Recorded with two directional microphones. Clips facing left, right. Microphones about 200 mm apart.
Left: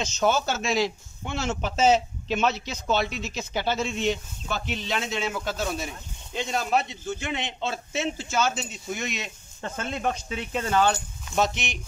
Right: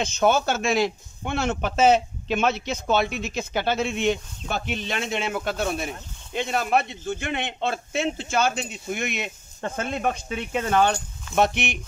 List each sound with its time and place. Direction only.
0.0 s a man's voice: 55° right (ahead or behind)